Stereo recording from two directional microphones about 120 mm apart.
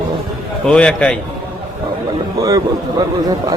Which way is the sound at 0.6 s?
5° left (ahead or behind).